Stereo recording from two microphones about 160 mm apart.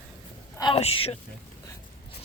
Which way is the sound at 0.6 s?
35° left (ahead or behind).